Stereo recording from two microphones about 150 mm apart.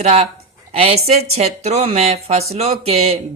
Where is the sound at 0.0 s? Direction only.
50° right (ahead or behind).